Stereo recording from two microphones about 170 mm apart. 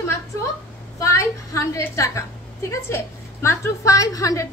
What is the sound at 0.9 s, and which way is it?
A woman's voice, 15° left (ahead or behind).